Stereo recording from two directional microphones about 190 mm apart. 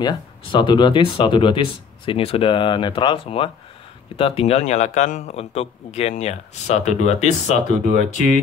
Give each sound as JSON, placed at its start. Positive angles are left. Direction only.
{"t": 0.0, "sound": "a man's voice", "side_deg": 25}